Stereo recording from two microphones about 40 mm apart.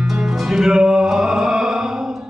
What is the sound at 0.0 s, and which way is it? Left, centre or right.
Music, centre.